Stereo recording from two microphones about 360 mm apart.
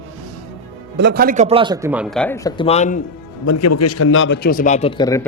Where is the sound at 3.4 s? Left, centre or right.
Left; by 5.3 s centre.